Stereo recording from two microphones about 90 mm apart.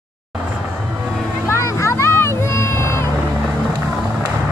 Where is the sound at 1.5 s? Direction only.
30° left (ahead or behind).